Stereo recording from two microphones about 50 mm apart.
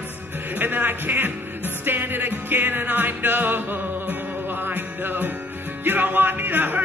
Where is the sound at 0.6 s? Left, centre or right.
Right.